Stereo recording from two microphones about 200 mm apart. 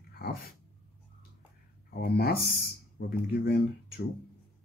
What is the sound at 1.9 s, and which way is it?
Speech, 50° left (ahead or behind).